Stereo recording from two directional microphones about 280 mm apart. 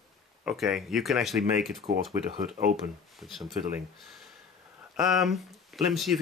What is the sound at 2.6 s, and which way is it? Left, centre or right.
Speech, centre.